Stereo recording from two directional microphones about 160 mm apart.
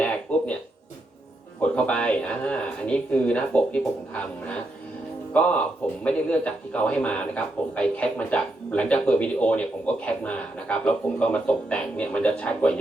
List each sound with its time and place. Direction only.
0.0 s music: 10° left (ahead or behind)
1.6 s a man's voice: 5° left (ahead or behind)